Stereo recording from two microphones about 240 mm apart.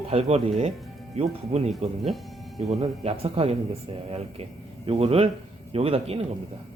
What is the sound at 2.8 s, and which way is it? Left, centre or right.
A man's voice, right.